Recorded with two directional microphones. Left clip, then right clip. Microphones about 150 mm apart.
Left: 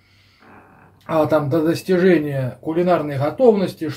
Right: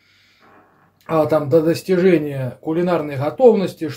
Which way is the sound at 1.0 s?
50° right (ahead or behind).